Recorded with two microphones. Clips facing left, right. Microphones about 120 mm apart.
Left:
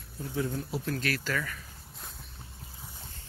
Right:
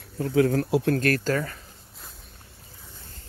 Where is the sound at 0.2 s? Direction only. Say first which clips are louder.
Right 11 dB; 85° right.